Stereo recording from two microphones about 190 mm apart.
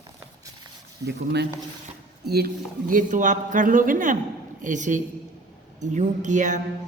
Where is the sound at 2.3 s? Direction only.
55° right (ahead or behind).